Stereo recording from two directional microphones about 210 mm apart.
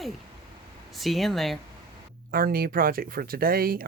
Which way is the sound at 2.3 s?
45° right (ahead or behind).